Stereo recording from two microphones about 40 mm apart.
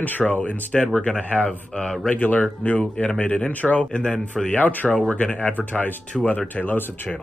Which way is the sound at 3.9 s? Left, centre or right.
Left.